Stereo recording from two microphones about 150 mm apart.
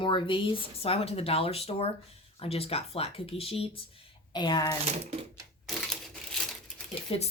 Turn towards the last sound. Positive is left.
turn(degrees=40)  # may be behind; listen again after turning